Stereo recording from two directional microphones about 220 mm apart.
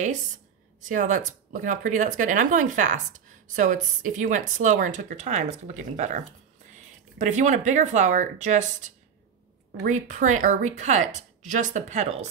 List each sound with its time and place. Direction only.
0.7 s speech: 35° right (ahead or behind)